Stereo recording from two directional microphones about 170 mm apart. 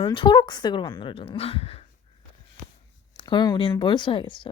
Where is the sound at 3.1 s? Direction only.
25° left (ahead or behind).